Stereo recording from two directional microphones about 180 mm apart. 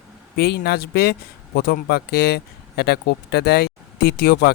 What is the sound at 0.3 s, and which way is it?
Speech, 60° left (ahead or behind).